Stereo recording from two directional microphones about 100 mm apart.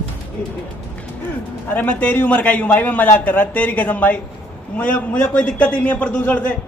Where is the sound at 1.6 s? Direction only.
15° left (ahead or behind).